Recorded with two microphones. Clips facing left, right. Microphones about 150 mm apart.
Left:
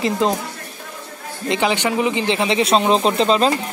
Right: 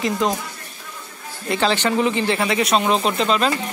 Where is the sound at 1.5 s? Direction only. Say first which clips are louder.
Even; 15° left (ahead or behind).